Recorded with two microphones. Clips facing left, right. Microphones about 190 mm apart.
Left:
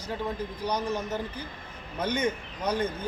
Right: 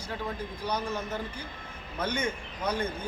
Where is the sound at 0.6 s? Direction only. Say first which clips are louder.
Left 2 dB; 10° left (ahead or behind).